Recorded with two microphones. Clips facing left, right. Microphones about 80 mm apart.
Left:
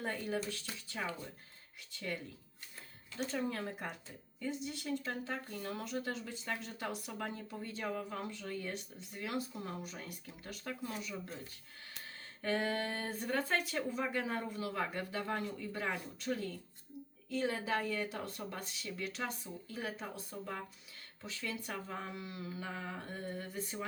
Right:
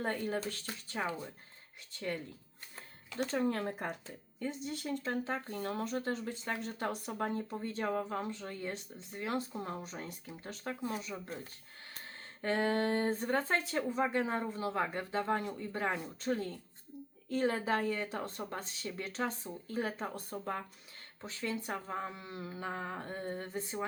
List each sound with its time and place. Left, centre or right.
0.0 s speech: right
3.5 s speech: right
11.9 s speech: right